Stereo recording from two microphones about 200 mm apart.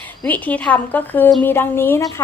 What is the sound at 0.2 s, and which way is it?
Speech, 10° left (ahead or behind).